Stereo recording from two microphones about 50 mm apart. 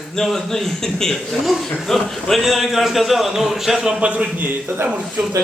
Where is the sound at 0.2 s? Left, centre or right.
Centre.